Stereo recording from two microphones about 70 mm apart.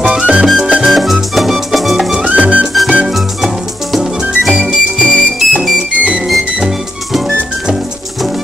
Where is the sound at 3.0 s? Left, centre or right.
Centre.